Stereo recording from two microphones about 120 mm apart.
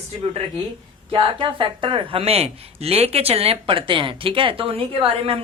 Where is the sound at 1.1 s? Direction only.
45° right (ahead or behind).